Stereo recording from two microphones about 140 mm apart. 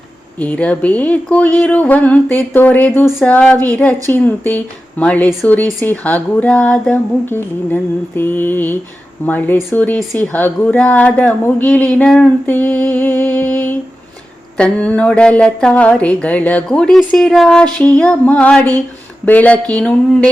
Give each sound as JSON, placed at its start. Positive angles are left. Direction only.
{"t": 0.3, "sound": "speech", "side_deg": 10}
{"t": 10.0, "sound": "speech", "side_deg": 0}
{"t": 10.3, "sound": "speech", "side_deg": 10}